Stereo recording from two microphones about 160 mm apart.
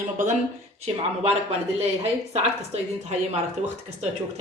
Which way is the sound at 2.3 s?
40° right (ahead or behind).